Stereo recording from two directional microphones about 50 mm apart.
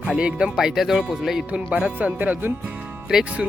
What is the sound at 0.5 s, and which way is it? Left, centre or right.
Speech, centre.